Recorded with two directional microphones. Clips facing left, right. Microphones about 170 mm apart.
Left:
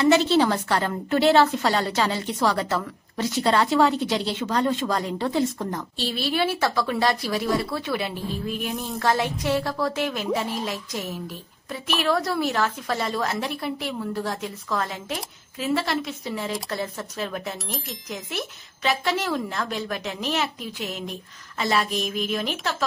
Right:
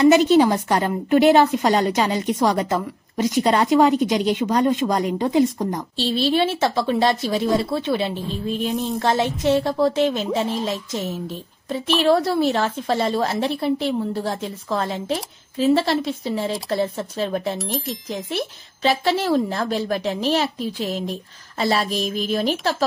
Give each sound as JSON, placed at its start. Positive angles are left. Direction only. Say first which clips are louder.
{"t": 0.0, "sound": "a woman's voice", "louder": "right 5 dB", "side_deg": -15}
{"t": 17.6, "sound": "speech", "louder": "right 7 dB", "side_deg": 0}
{"t": 18.1, "sound": "a woman's voice", "louder": "right 4 dB", "side_deg": -30}